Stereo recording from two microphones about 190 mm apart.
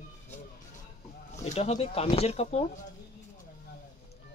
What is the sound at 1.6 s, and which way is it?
Speech, 35° left (ahead or behind).